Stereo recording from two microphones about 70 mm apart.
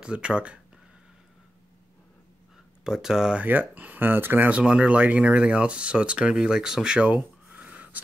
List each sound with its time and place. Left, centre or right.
0.0 s speech: centre
2.8 s speech: centre
3.3 s speech: right
4.6 s speech: centre